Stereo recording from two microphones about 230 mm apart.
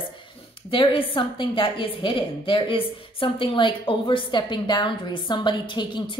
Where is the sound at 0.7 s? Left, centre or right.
Left.